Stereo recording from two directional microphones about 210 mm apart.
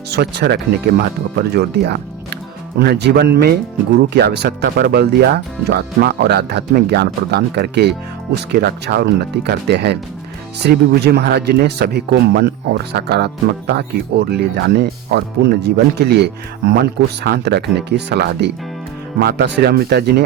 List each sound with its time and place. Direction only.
0.1 s speech: 50° right (ahead or behind)
17.2 s speech: 50° right (ahead or behind)